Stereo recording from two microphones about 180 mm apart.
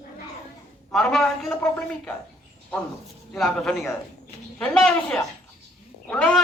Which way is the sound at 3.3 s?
Centre (ahead or behind).